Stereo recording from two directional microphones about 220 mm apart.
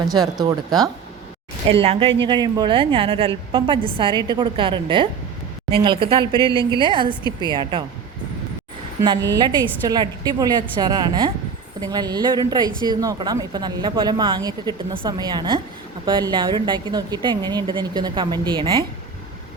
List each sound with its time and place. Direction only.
0.0 s a woman's voice: 15° right (ahead or behind)
9.3 s a woman's voice: 20° right (ahead or behind)